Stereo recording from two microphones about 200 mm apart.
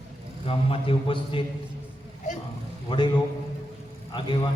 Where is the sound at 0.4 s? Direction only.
25° left (ahead or behind).